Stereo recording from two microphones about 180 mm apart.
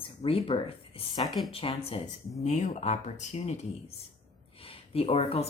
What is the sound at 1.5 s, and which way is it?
Speech, 30° left (ahead or behind).